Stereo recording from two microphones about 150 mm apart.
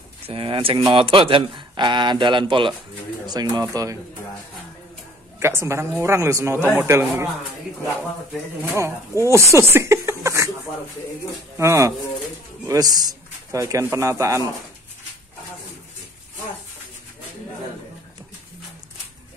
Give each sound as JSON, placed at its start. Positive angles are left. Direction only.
{"t": 0.3, "sound": "speech", "side_deg": -35}
{"t": 5.4, "sound": "speech", "side_deg": -15}
{"t": 8.7, "sound": "speech", "side_deg": -20}
{"t": 11.5, "sound": "a man's voice", "side_deg": -20}